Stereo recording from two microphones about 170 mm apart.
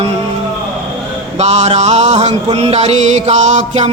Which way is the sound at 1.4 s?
40° right (ahead or behind).